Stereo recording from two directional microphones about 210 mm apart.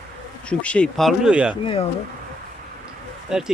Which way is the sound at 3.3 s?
5° right (ahead or behind).